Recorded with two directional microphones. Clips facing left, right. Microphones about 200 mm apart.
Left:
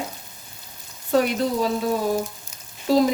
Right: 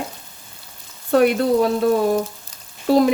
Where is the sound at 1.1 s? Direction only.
60° right (ahead or behind).